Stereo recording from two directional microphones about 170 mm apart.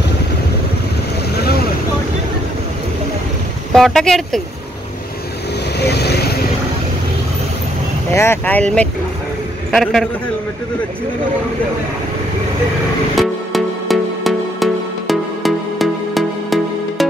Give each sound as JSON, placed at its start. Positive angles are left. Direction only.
{"t": 1.3, "sound": "vehicle", "side_deg": 70}
{"t": 3.7, "sound": "speech", "side_deg": 0}
{"t": 5.8, "sound": "vehicle", "side_deg": 75}
{"t": 8.1, "sound": "a man's voice", "side_deg": 15}
{"t": 13.1, "sound": "music", "side_deg": 0}